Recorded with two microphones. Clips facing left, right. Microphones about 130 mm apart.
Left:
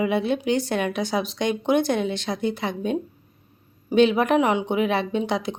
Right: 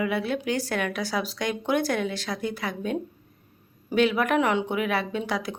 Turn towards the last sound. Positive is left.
turn(degrees=25)  # may be behind; listen again after turning